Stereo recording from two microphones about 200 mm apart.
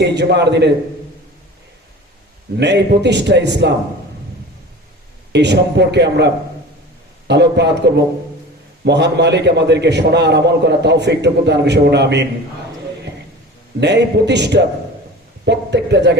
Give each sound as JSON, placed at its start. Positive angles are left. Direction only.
{"t": 0.0, "sound": "a man's voice", "side_deg": -55}
{"t": 2.6, "sound": "a man's voice", "side_deg": -60}
{"t": 5.3, "sound": "a man's voice", "side_deg": -60}
{"t": 13.7, "sound": "a man's voice", "side_deg": -60}